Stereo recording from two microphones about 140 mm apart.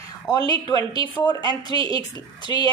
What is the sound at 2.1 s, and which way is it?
Speech, 35° right (ahead or behind).